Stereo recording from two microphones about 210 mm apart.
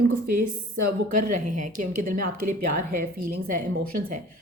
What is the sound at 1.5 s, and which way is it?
A woman's voice, 40° right (ahead or behind).